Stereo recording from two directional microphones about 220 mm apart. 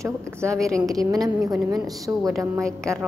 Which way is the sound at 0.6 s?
Centre (ahead or behind).